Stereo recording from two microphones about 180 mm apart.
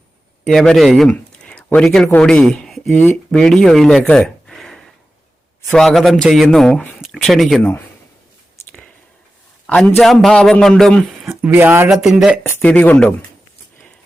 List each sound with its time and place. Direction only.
0.4 s a man's voice: centre (ahead or behind)
4.0 s a sound: 5° left (ahead or behind)
5.7 s a man's voice: centre (ahead or behind)
9.6 s a man's voice: 5° left (ahead or behind)
11.3 s a man's voice: 10° right (ahead or behind)
12.4 s speech: 10° left (ahead or behind)